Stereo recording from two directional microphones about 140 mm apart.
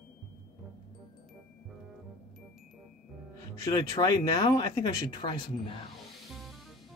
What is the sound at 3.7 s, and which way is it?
Speech, 25° left (ahead or behind).